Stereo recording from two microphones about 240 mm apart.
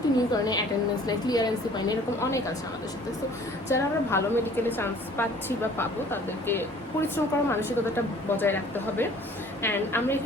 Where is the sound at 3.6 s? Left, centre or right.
Centre.